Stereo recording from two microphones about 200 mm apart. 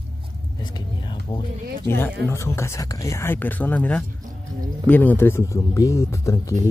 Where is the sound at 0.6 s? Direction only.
20° left (ahead or behind).